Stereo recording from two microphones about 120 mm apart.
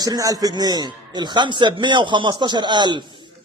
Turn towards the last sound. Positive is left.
turn(degrees=-40)  # may be behind; listen again after turning